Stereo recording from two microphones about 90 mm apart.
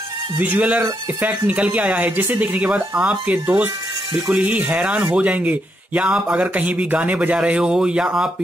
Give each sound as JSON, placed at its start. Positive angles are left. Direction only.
{"t": 0.4, "sound": "speech", "side_deg": -15}